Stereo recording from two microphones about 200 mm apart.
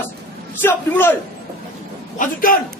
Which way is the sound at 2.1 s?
45° left (ahead or behind).